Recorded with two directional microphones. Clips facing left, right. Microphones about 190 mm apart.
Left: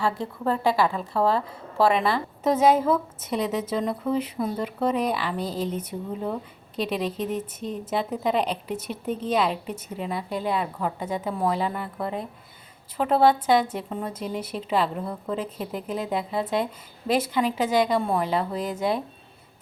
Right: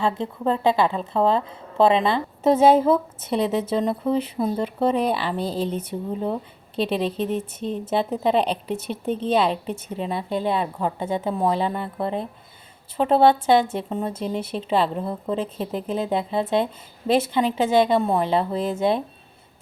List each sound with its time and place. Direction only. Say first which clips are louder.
0.0 s a woman's voice: right 3 dB; 20° right (ahead or behind)